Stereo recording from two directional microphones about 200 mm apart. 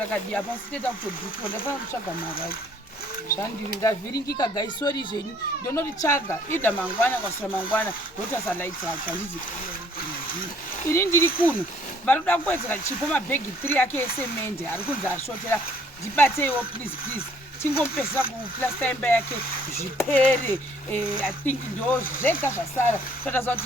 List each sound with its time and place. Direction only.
0.1 s speech: 10° left (ahead or behind)
4.4 s speech: 20° left (ahead or behind)
10.8 s speech: 15° left (ahead or behind)
17.6 s speech: 10° left (ahead or behind)